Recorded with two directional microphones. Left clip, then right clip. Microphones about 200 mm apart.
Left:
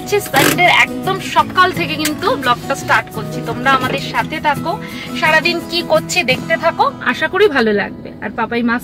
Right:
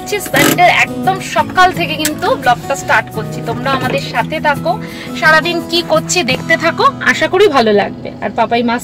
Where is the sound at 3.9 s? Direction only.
Centre (ahead or behind); by 8.7 s 20° right (ahead or behind).